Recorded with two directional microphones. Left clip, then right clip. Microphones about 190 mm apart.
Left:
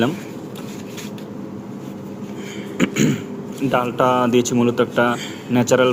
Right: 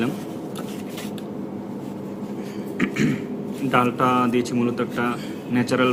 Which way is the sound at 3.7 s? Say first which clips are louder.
Left 2 dB; 15° left (ahead or behind).